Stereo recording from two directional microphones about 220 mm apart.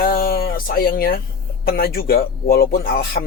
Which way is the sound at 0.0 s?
40° left (ahead or behind).